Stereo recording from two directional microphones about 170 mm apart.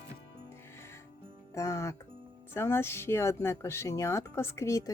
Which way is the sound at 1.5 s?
15° left (ahead or behind).